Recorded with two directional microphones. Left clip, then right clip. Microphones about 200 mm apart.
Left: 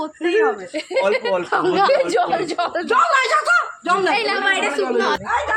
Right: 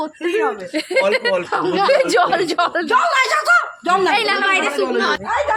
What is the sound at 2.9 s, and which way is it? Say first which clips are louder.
Speech: left 1 dB; 50° right (ahead or behind).